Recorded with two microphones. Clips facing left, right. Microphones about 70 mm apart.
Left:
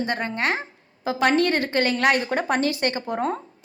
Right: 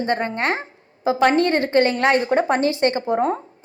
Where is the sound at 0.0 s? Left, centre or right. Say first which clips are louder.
Right 3 dB; right.